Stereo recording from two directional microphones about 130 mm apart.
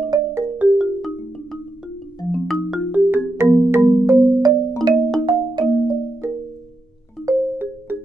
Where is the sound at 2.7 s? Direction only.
15° right (ahead or behind).